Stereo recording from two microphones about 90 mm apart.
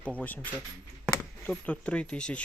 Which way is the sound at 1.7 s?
15° left (ahead or behind).